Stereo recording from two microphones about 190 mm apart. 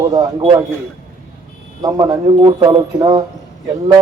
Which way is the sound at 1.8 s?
20° right (ahead or behind).